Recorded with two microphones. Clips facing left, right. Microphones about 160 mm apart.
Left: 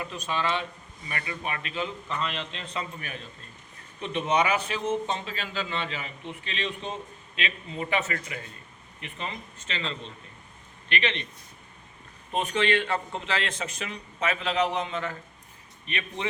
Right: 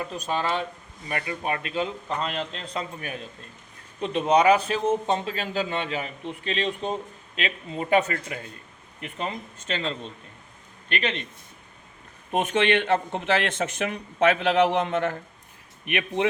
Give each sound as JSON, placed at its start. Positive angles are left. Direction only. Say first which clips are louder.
{"t": 0.3, "sound": "a man's voice", "louder": "right 2 dB", "side_deg": -45}
{"t": 12.3, "sound": "speech", "louder": "right 3 dB", "side_deg": -55}